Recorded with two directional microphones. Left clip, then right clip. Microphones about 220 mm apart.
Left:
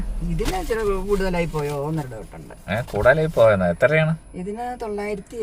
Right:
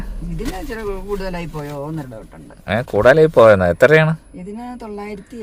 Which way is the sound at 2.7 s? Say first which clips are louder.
Right 5 dB; 50° right (ahead or behind).